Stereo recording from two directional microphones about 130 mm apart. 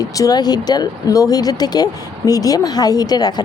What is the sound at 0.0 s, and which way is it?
Speech, 30° left (ahead or behind).